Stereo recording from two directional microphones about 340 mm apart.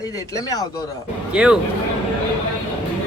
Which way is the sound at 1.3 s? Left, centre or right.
Centre.